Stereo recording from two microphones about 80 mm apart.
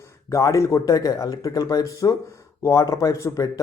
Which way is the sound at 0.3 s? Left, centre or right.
Left.